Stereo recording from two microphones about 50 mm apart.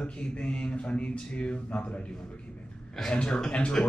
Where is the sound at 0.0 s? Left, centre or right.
Left.